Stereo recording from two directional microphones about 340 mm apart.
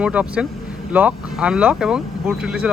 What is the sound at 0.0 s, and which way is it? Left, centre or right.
Speech, centre.